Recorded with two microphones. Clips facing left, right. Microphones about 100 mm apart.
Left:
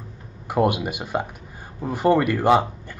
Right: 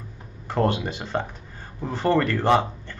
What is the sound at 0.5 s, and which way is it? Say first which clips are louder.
Speech: left 2 dB; 10° left (ahead or behind).